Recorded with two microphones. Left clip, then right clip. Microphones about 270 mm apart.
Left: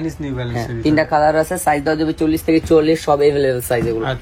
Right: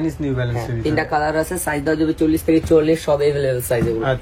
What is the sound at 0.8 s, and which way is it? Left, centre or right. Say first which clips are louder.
Speech: left 5 dB; left.